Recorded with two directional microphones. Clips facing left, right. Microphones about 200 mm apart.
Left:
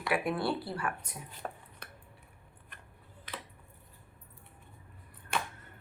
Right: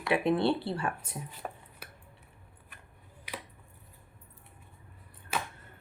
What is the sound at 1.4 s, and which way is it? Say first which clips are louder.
Chopping: left 2 dB; 5° right (ahead or behind).